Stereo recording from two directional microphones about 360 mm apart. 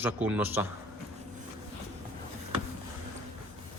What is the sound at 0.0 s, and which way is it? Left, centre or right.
Speech, centre.